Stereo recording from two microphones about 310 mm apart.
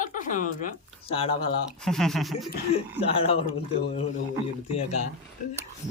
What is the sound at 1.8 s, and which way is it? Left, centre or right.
Speech, centre.